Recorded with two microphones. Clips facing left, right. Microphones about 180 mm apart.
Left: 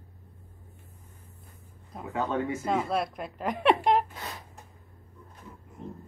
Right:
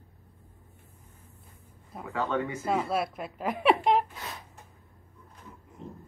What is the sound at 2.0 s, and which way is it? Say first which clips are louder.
Speech: even; 20° left (ahead or behind).